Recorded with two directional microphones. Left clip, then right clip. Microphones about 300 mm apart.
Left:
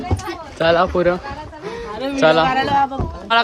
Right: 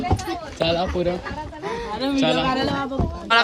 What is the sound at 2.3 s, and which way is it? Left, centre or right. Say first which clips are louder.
Speech: left 9 dB; centre.